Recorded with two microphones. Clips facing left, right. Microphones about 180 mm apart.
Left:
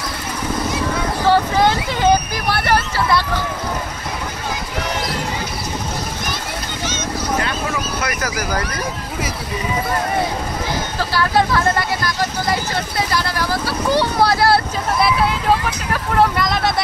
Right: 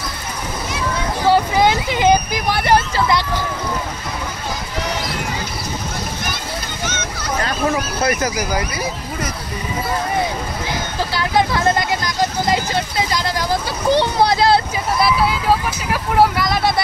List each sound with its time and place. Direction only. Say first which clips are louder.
1.2 s speech: right 1 dB; 15° right (ahead or behind)
8.0 s speech: right 5 dB; 25° right (ahead or behind)
8.4 s speech: right 1 dB; 10° right (ahead or behind)
11.0 s speech: even; 15° right (ahead or behind)
15.0 s speech: even; centre (ahead or behind)